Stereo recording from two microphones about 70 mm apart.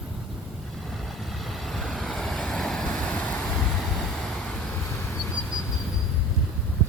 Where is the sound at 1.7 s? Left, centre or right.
Centre.